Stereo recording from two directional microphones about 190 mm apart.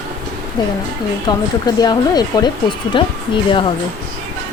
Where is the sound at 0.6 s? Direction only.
20° left (ahead or behind).